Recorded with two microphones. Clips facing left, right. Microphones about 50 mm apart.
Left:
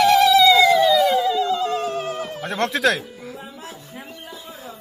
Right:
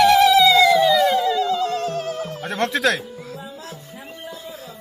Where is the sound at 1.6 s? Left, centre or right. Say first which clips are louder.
Even; centre.